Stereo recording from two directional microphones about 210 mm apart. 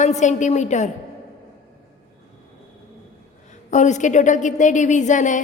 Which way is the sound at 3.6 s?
35° left (ahead or behind).